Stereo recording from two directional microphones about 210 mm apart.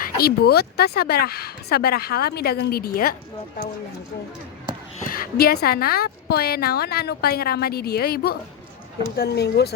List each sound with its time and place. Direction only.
0.0 s a woman's voice: 45° left (ahead or behind)
4.9 s a woman's voice: 45° left (ahead or behind)